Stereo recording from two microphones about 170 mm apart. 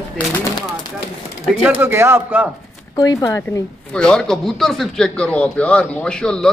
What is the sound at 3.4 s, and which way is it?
Speech, 5° left (ahead or behind).